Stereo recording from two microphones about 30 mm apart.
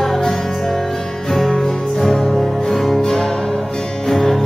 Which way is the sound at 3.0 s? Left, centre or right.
Centre.